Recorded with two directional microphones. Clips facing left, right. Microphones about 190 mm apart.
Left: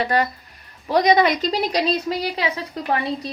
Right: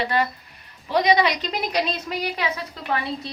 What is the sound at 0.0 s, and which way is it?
Speech, 45° left (ahead or behind).